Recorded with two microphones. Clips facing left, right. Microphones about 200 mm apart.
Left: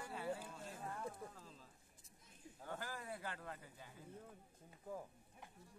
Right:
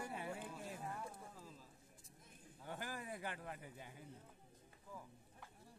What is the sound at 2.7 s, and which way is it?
A man's voice, 15° right (ahead or behind).